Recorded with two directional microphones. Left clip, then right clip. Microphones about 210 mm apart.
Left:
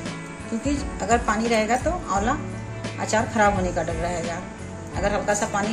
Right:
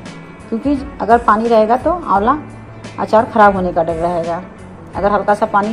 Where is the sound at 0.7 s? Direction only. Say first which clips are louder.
Right 10 dB; centre (ahead or behind).